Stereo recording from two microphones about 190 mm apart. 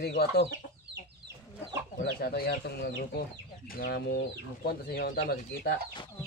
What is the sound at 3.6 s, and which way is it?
Speech, 50° left (ahead or behind).